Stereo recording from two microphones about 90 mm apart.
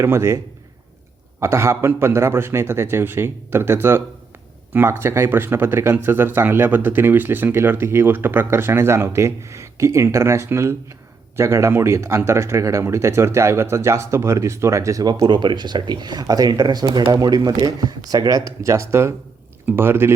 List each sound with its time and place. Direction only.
0.0 s speech: 30° right (ahead or behind)
1.4 s speech: 30° right (ahead or behind)